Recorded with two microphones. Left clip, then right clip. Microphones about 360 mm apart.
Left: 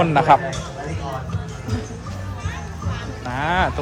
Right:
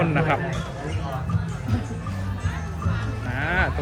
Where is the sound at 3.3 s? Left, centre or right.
Centre.